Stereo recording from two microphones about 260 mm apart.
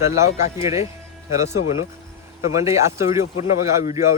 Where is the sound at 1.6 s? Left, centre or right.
Left.